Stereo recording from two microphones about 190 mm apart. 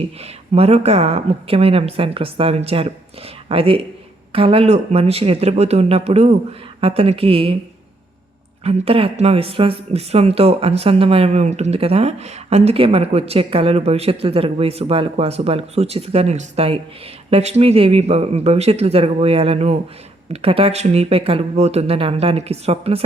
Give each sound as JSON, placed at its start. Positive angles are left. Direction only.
{"t": 0.2, "sound": "speech", "side_deg": -30}
{"t": 8.6, "sound": "speech", "side_deg": -30}